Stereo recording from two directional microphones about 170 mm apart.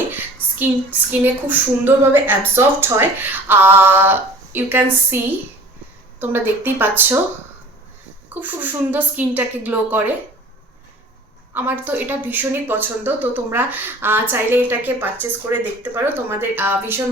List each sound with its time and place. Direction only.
0.1 s a sound: 10° right (ahead or behind)
1.2 s a woman's voice: 10° right (ahead or behind)
8.3 s a woman's voice: 10° right (ahead or behind)
11.5 s a woman's voice: 10° right (ahead or behind)